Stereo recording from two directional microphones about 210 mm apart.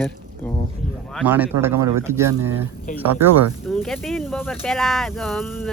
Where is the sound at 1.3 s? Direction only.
10° right (ahead or behind).